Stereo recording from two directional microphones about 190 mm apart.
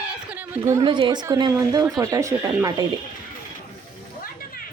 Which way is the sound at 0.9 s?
25° right (ahead or behind).